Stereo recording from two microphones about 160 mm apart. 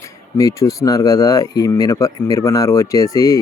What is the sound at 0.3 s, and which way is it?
Speech, 20° left (ahead or behind).